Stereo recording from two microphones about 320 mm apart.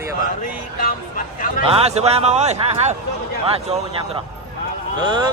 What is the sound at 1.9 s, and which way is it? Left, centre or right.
A man's voice, centre.